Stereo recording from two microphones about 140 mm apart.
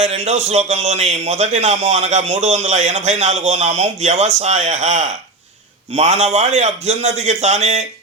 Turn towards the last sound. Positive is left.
turn(degrees=-50)  # may be behind; listen again after turning